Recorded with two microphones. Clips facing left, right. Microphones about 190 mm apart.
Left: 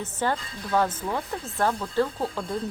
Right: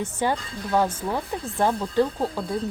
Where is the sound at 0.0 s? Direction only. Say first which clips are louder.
Right 2 dB; 15° right (ahead or behind).